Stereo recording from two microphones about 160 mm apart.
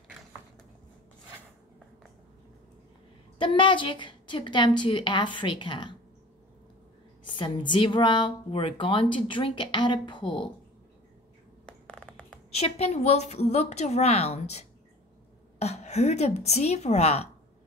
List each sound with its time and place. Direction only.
3.3 s a woman's voice: 30° left (ahead or behind)
7.2 s speech: 30° left (ahead or behind)
11.6 s a sound: 5° left (ahead or behind)
12.5 s a woman's voice: 40° left (ahead or behind)